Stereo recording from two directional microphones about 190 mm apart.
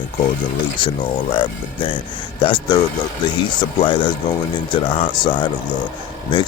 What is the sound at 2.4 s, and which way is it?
Speech, 25° left (ahead or behind).